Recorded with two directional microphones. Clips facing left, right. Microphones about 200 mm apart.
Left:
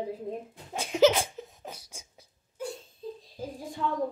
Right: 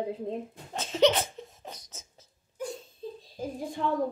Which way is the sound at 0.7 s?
10° left (ahead or behind).